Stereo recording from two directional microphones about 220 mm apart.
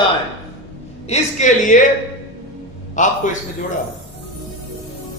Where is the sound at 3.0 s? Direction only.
35° left (ahead or behind).